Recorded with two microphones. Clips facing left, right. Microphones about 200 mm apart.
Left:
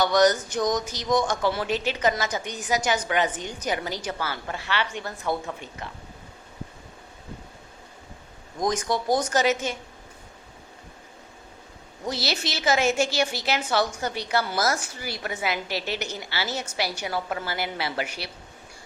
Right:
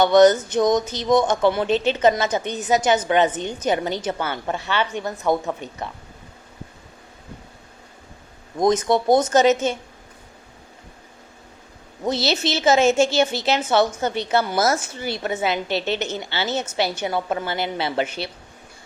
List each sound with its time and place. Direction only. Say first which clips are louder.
0.0 s a woman's voice: right 7 dB; 25° right (ahead or behind)
8.6 s a woman's voice: right 7 dB; 25° right (ahead or behind)
12.0 s a woman's voice: right 7 dB; 25° right (ahead or behind)